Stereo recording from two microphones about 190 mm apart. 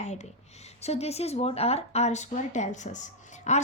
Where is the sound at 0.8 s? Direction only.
35° left (ahead or behind).